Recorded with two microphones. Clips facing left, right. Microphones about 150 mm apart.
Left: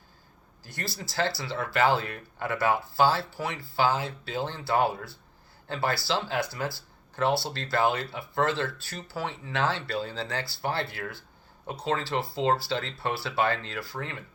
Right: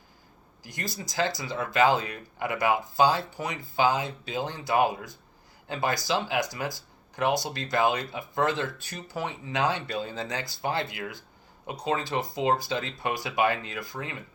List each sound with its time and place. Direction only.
0.6 s speech: 15° right (ahead or behind)